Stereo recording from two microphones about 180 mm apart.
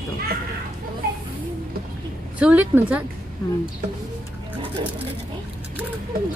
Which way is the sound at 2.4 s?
10° right (ahead or behind).